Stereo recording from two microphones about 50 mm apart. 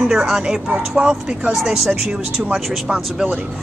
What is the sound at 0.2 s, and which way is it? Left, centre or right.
A woman's voice, centre.